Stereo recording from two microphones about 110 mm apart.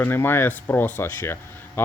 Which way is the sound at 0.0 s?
20° left (ahead or behind).